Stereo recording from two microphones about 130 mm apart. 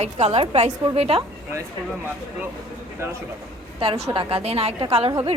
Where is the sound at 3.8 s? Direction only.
40° right (ahead or behind).